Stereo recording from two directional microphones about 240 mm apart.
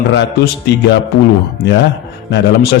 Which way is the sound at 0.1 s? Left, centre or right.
Left.